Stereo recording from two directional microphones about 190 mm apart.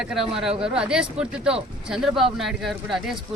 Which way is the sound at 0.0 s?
5° right (ahead or behind).